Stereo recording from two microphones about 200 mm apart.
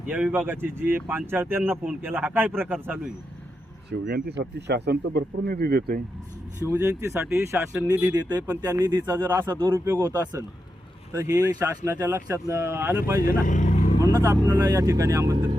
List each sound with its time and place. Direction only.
0.1 s speech: 10° right (ahead or behind)
3.8 s speech: 50° right (ahead or behind)
6.7 s speech: 10° right (ahead or behind)
13.2 s vehicle: 40° left (ahead or behind)
14.0 s speech: 15° right (ahead or behind)